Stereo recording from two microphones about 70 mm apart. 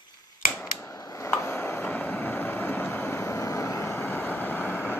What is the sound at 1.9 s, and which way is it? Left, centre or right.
Vehicle, left.